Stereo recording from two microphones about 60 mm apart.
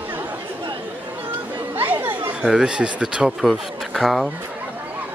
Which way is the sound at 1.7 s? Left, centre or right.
Right.